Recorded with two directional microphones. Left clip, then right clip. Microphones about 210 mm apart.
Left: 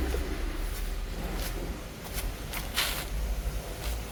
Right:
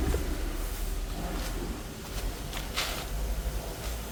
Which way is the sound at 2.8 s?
15° left (ahead or behind).